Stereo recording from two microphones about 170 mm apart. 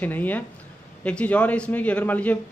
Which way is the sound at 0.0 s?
10° left (ahead or behind).